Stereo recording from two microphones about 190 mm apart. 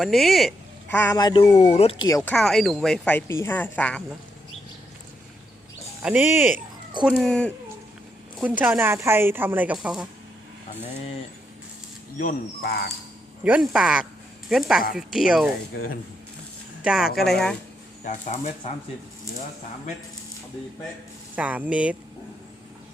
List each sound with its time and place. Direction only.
0.0 s speech: centre (ahead or behind); by 2.0 s 30° left (ahead or behind)
2.0 s speech: 20° left (ahead or behind)
2.3 s speech: centre (ahead or behind)
6.0 s a woman's voice: 5° right (ahead or behind)
7.1 s speech: 5° left (ahead or behind)
8.4 s a woman's voice: 10° right (ahead or behind)
12.1 s speech: 45° left (ahead or behind)
13.4 s speech: 5° right (ahead or behind)
16.8 s speech: 5° right (ahead or behind)
18.0 s speech: 35° left (ahead or behind)
21.3 s a woman's voice: 10° right (ahead or behind)